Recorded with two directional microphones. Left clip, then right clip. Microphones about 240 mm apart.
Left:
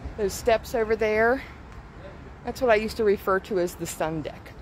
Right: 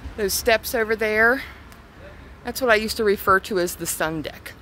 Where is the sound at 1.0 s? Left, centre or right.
Centre.